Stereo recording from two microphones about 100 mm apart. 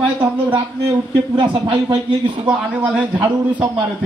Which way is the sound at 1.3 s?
50° right (ahead or behind).